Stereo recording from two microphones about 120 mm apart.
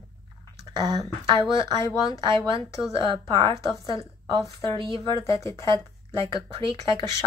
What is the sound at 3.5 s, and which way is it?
Speech, 30° left (ahead or behind).